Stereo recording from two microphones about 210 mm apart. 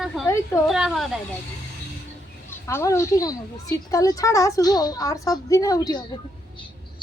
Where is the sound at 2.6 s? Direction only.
15° left (ahead or behind).